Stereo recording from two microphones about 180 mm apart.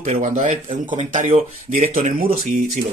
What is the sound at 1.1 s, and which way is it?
A man's voice, 45° right (ahead or behind).